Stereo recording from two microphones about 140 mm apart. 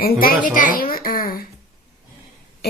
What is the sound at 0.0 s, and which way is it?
Speech, 90° left.